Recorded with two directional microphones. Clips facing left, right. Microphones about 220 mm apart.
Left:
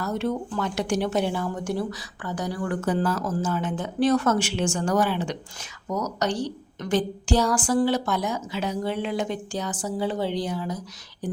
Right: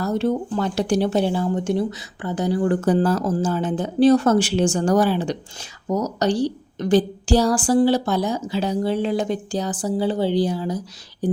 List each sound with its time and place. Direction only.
0.0 s speech: 35° right (ahead or behind)